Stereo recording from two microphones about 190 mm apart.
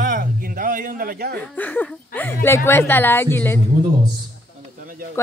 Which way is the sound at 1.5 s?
10° left (ahead or behind).